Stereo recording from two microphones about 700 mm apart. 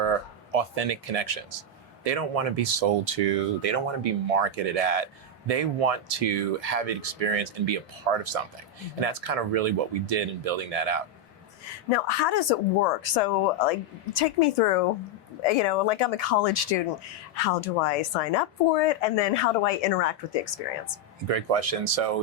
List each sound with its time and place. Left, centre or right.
0.5 s speech: right
11.9 s speech: left
21.2 s speech: right